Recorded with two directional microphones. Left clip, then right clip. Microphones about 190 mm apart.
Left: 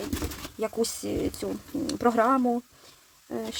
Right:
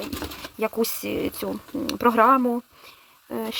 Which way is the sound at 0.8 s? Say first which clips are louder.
Right 3 dB; 15° right (ahead or behind).